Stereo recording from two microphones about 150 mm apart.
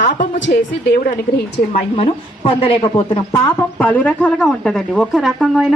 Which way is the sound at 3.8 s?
10° left (ahead or behind).